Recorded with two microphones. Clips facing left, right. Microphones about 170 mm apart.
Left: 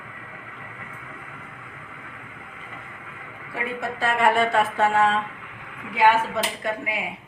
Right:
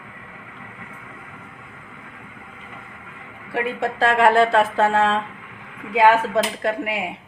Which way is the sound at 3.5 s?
85° right.